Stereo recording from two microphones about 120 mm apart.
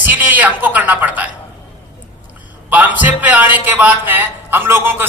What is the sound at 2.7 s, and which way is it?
A man's voice, 15° right (ahead or behind).